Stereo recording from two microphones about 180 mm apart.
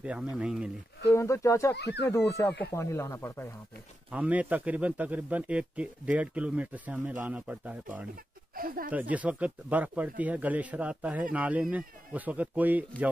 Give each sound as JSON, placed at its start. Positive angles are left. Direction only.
{"t": 0.0, "sound": "a man's voice", "side_deg": -5}
{"t": 1.1, "sound": "speech", "side_deg": 15}
{"t": 1.8, "sound": "speech", "side_deg": 70}
{"t": 2.0, "sound": "speech", "side_deg": 15}
{"t": 4.1, "sound": "a man's voice", "side_deg": -5}
{"t": 8.5, "sound": "speech", "side_deg": -50}
{"t": 9.1, "sound": "a man's voice", "side_deg": -10}